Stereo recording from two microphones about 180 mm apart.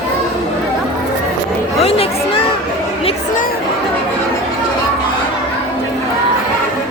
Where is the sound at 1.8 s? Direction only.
35° left (ahead or behind).